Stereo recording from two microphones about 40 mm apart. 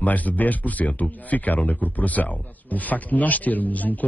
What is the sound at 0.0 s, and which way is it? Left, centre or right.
Speech, left.